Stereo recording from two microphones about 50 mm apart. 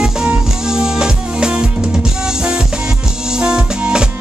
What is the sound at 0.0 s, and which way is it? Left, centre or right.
Music, centre.